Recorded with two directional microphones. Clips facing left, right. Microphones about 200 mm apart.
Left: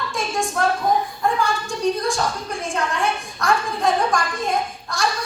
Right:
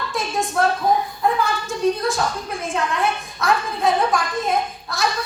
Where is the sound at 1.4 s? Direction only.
Centre (ahead or behind).